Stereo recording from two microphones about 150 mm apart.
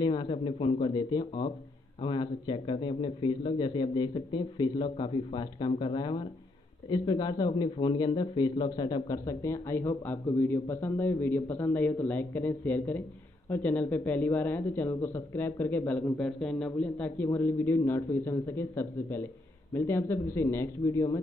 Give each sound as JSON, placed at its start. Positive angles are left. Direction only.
{"t": 0.0, "sound": "speech", "side_deg": 30}